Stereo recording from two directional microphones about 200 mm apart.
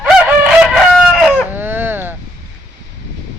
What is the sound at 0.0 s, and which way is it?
Chicken, 5° right (ahead or behind).